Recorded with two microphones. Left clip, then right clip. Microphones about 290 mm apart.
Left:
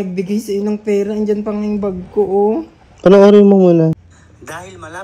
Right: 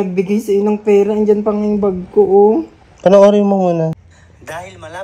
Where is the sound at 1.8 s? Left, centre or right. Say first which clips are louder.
Right 4 dB; right.